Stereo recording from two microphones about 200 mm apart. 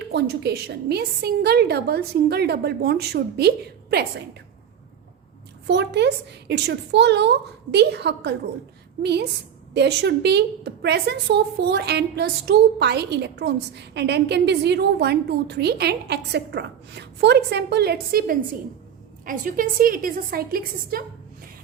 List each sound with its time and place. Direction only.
0.1 s a woman's voice: 55° right (ahead or behind)
5.6 s a woman's voice: 60° right (ahead or behind)
9.7 s a woman's voice: 55° right (ahead or behind)